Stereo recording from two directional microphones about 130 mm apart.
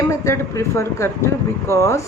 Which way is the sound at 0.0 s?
20° left (ahead or behind).